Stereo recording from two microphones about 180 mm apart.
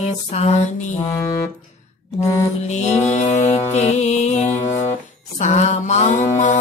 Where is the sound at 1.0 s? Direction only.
15° left (ahead or behind).